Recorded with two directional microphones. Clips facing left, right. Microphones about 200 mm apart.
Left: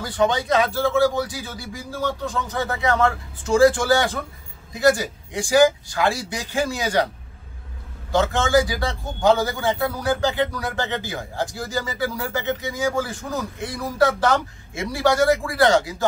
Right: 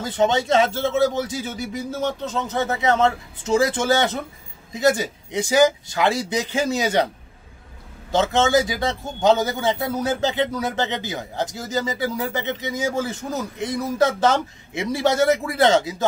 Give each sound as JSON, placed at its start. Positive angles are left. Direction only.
{"t": 0.0, "sound": "a man's voice", "side_deg": -20}
{"t": 8.1, "sound": "a man's voice", "side_deg": -20}